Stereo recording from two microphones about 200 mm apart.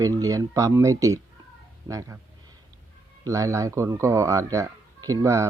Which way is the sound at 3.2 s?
15° right (ahead or behind).